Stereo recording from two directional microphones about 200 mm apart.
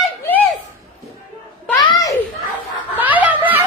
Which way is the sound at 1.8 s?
15° left (ahead or behind).